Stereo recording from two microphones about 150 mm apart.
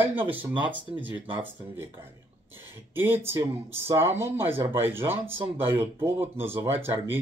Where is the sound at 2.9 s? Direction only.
15° right (ahead or behind).